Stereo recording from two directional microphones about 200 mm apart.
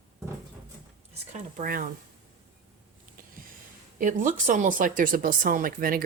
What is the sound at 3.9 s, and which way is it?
Speech, 40° right (ahead or behind).